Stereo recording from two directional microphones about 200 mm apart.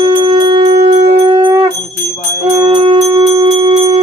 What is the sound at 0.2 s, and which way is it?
Wind instrument, 25° right (ahead or behind).